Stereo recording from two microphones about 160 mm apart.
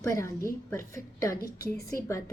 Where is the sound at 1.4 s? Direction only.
70° left (ahead or behind).